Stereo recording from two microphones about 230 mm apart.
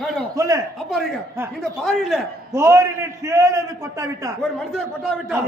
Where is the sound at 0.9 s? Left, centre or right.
Centre.